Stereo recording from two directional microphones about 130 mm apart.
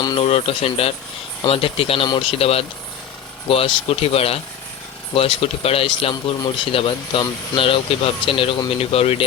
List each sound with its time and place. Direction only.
0.2 s speech: 50° left (ahead or behind)